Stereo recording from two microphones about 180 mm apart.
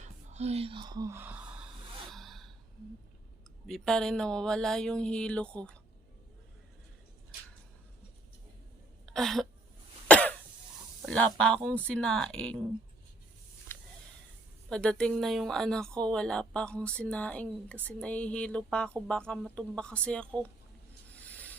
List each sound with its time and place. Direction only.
0.0 s speech: 40° right (ahead or behind); by 1.6 s 10° right (ahead or behind)
2.1 s gasp: centre (ahead or behind)
3.7 s a woman's voice: 5° left (ahead or behind)
9.0 s speech: centre (ahead or behind)
10.1 s cough: 5° left (ahead or behind)
11.0 s sizzle: 5° left (ahead or behind)
11.3 s a woman's voice: 5° left (ahead or behind)
14.7 s a woman's voice: 5° left (ahead or behind)
21.2 s filing: 10° left (ahead or behind)